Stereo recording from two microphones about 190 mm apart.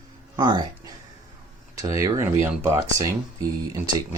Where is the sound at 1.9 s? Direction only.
15° right (ahead or behind).